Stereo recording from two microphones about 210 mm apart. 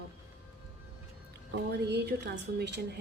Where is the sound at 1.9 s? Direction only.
55° right (ahead or behind).